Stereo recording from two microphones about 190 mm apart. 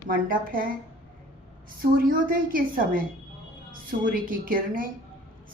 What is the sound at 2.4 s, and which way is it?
Speech, 50° right (ahead or behind).